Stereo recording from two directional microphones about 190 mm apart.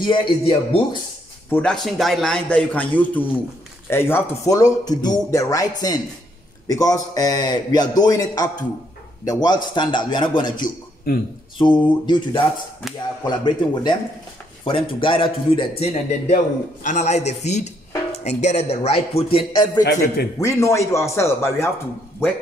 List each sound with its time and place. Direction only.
0.0 s a man's voice: 25° left (ahead or behind)
1.5 s a man's voice: 5° left (ahead or behind); by 10.7 s 25° left (ahead or behind)
11.1 s speech: 55° left (ahead or behind)
11.6 s a man's voice: 25° left (ahead or behind)
12.8 s a man's voice: centre (ahead or behind)
13.2 s a man's voice: 25° left (ahead or behind)
19.8 s a man's voice: 65° left (ahead or behind)
20.3 s speech: 15° left (ahead or behind)